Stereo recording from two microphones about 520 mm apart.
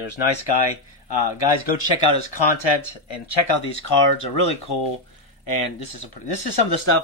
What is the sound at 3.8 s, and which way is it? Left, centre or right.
Speech, left.